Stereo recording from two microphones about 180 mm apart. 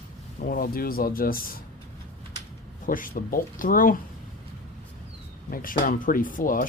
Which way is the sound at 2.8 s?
50° left (ahead or behind).